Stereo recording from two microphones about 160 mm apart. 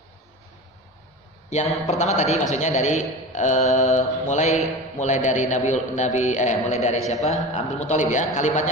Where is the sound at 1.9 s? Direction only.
45° left (ahead or behind).